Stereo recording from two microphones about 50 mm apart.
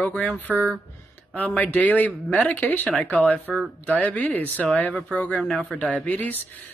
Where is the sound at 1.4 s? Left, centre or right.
Left.